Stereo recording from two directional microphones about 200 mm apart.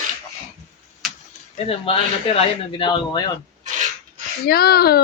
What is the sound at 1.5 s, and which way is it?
Speech, 30° left (ahead or behind).